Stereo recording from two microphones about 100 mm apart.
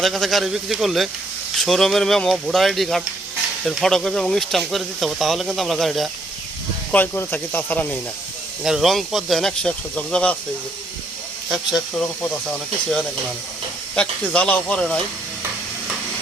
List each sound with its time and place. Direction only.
0.0 s speech: centre (ahead or behind)
6.9 s speech: 20° left (ahead or behind)
8.6 s speech: 5° right (ahead or behind)
11.4 s speech: centre (ahead or behind)